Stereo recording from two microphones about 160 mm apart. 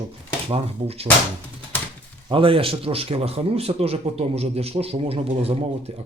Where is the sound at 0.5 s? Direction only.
40° right (ahead or behind).